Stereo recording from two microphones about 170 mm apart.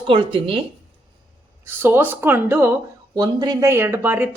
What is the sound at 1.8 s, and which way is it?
A woman's voice, 10° right (ahead or behind).